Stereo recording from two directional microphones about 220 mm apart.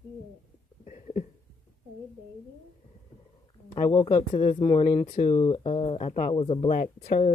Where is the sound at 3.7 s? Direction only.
15° left (ahead or behind).